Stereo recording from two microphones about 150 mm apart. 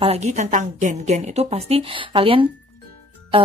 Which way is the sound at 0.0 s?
45° right (ahead or behind).